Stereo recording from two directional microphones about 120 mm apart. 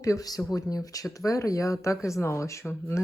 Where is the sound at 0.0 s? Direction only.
30° left (ahead or behind).